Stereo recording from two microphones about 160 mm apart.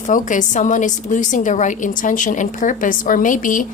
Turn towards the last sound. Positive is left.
turn(degrees=55)  # may be behind; listen again after turning